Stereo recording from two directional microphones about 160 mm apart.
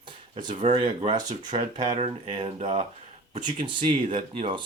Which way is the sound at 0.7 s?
30° right (ahead or behind).